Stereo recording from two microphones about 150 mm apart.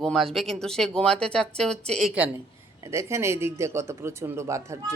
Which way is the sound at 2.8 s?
20° right (ahead or behind).